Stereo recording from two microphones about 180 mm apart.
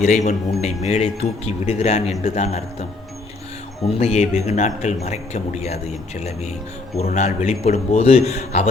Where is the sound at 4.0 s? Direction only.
35° left (ahead or behind).